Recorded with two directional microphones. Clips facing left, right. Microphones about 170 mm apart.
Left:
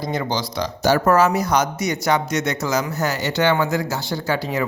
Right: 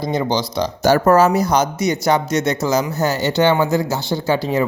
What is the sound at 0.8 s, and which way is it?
Speech, 45° right (ahead or behind).